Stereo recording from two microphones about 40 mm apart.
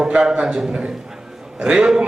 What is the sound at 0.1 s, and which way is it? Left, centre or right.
A man's voice, right.